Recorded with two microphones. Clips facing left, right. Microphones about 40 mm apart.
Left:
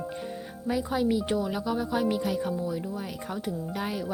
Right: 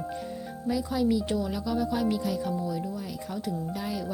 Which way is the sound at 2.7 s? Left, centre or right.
Left.